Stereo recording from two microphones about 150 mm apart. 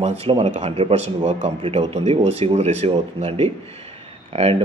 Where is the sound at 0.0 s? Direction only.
45° right (ahead or behind).